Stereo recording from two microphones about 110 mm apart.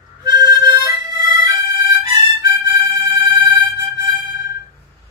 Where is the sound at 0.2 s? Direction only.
40° right (ahead or behind).